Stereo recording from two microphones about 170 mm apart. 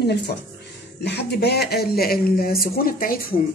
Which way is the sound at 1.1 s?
75° left (ahead or behind).